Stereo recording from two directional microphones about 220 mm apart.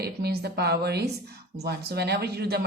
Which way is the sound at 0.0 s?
45° right (ahead or behind).